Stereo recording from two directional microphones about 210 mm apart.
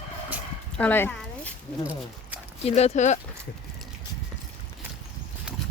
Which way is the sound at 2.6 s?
30° left (ahead or behind).